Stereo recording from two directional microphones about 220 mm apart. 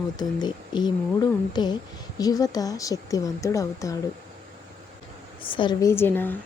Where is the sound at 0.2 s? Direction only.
20° left (ahead or behind).